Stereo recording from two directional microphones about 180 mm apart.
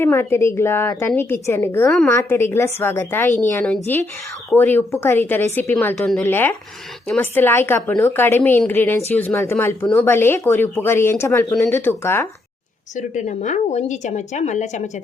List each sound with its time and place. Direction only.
0.0 s a woman's voice: 15° left (ahead or behind)
13.0 s speech: 45° left (ahead or behind)